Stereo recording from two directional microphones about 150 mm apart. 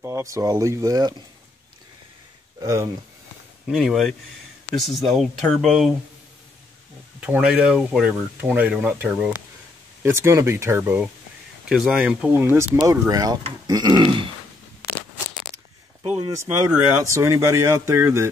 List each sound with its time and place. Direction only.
0.0 s speech: 20° right (ahead or behind)
2.6 s speech: 20° right (ahead or behind)
3.6 s speech: centre (ahead or behind)
7.2 s speech: 5° right (ahead or behind)
10.0 s speech: 20° right (ahead or behind)
16.4 s speech: 20° right (ahead or behind)